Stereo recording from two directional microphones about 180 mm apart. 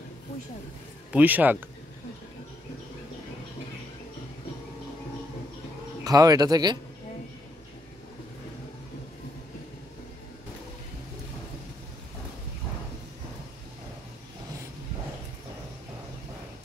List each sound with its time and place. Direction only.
1.1 s speech: 10° right (ahead or behind)
6.0 s speech: 20° right (ahead or behind)